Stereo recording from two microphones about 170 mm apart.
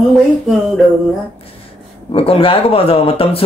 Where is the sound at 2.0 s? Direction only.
30° left (ahead or behind).